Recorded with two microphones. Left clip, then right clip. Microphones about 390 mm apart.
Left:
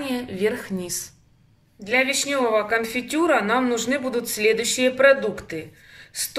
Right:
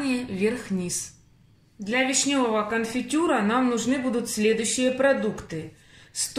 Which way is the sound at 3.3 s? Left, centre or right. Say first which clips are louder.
Left 5 dB; left.